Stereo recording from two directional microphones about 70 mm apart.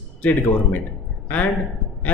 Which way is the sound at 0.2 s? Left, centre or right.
Left.